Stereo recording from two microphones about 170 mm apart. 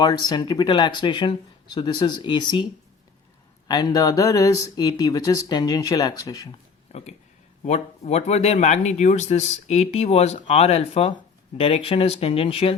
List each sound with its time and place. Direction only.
0.0 s speech: 20° left (ahead or behind)
3.7 s speech: 25° left (ahead or behind)
6.9 s speech: 40° left (ahead or behind)